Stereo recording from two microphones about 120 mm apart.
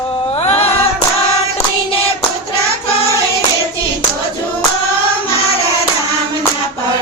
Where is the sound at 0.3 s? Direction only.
60° left (ahead or behind).